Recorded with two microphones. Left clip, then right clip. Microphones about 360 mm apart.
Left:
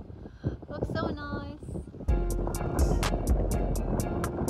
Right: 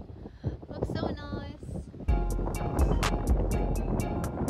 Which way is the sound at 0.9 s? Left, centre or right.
Centre.